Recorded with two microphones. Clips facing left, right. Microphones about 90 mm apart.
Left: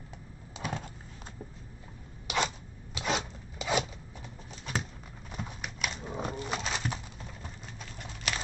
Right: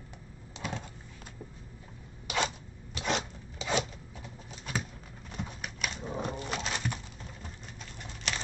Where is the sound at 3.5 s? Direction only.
5° left (ahead or behind).